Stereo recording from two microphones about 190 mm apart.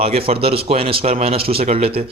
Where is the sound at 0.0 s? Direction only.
30° right (ahead or behind).